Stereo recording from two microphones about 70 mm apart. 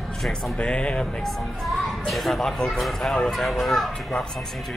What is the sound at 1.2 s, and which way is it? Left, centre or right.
Speech, centre.